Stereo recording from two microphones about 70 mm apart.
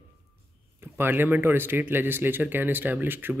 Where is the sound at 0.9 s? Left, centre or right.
Right.